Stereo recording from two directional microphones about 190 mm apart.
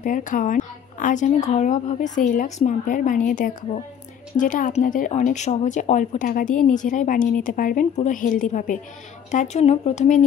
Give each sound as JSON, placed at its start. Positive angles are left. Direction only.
{"t": 0.0, "sound": "speech", "side_deg": 45}